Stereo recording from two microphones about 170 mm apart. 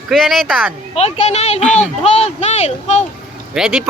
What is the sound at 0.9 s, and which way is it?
Speech, 40° left (ahead or behind).